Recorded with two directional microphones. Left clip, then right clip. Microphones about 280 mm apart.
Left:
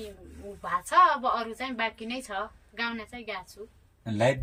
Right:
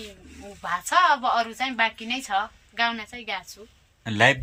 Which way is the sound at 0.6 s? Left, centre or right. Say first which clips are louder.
Right 2 dB; centre.